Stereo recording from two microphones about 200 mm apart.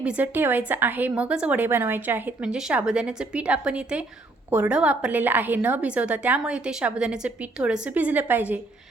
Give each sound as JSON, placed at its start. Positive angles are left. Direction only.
{"t": 0.0, "sound": "a woman's voice", "side_deg": -5}